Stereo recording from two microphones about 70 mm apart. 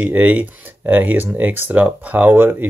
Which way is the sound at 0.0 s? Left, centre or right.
Right.